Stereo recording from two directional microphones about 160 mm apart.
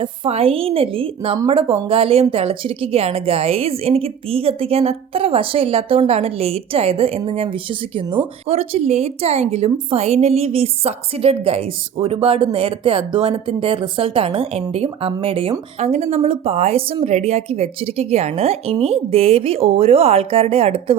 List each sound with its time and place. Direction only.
0.0 s a woman's voice: 35° right (ahead or behind)